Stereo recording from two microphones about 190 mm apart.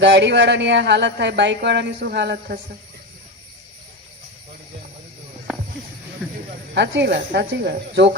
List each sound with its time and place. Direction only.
0.0 s speech: 65° right (ahead or behind)
6.7 s speech: 65° right (ahead or behind)